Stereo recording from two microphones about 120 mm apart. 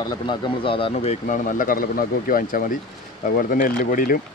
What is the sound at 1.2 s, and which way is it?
Speech, 90° left.